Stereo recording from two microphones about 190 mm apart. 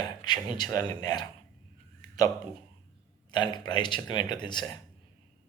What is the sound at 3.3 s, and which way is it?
Speech, 25° left (ahead or behind).